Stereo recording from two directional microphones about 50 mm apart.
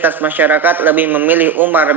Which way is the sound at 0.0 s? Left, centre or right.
Right.